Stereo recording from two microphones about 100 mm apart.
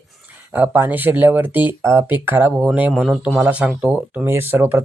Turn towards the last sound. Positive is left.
turn(degrees=-20)  # may be behind; listen again after turning